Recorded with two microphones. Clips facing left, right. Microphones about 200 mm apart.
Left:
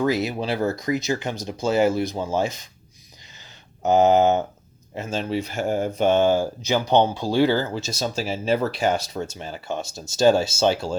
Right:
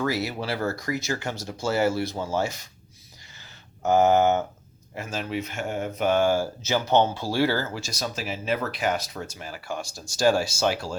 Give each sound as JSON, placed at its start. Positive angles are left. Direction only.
{"t": 0.0, "sound": "speech", "side_deg": 20}
{"t": 3.8, "sound": "speech", "side_deg": 20}